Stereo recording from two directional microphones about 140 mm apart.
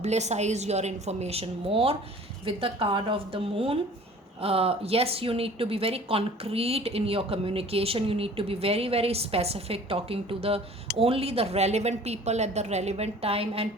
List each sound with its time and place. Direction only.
0.0 s speech: 55° right (ahead or behind)